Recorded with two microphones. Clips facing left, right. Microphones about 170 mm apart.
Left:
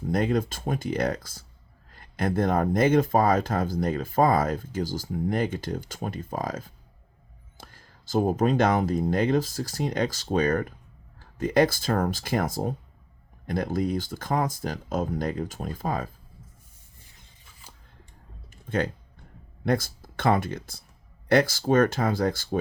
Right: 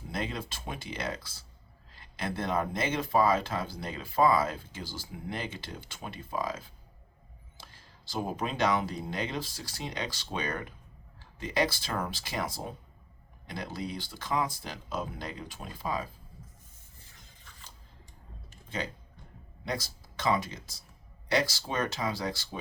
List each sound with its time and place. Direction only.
0.1 s speech: 50° left (ahead or behind)
19.6 s speech: 55° left (ahead or behind)